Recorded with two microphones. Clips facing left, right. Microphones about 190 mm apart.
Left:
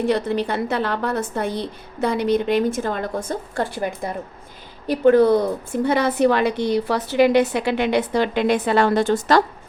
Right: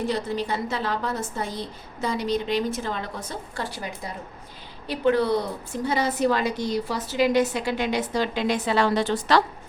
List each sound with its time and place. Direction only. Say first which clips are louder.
0.1 s a woman's voice: left 6 dB; 65° left (ahead or behind); by 9.4 s 45° left (ahead or behind)